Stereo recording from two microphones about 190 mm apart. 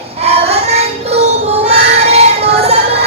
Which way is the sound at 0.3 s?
30° right (ahead or behind).